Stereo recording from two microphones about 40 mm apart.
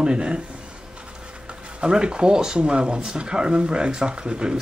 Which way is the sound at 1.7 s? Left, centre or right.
Right.